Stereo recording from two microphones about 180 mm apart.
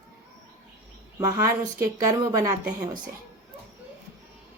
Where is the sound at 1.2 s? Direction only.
15° right (ahead or behind).